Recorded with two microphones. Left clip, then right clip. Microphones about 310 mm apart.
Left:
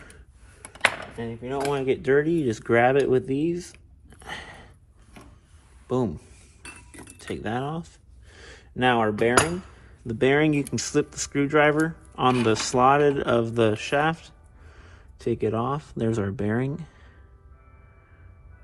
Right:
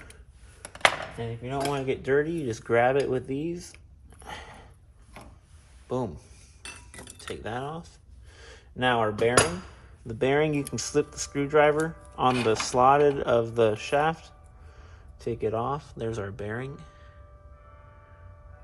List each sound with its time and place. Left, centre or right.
1.5 s cutlery: left
5.9 s speech: left
7.2 s a sound: left
10.1 s speech: left